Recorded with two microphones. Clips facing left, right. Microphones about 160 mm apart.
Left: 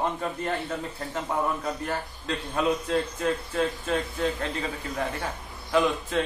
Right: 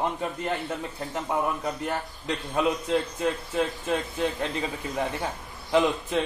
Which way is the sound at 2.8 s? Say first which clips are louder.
Even; 20° right (ahead or behind).